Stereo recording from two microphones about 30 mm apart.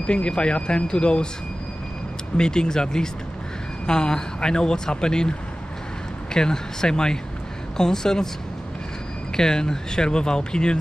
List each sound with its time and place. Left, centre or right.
0.0 s speech: left
2.3 s speech: left
6.3 s speech: left
9.4 s speech: left